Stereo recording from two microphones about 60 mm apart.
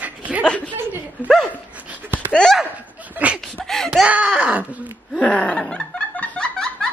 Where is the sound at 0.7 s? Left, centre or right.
Right.